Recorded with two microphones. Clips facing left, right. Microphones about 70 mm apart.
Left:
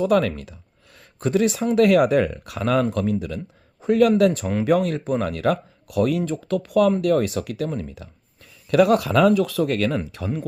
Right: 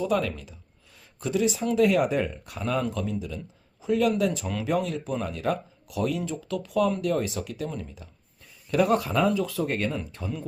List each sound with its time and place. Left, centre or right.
0.0 s speech: left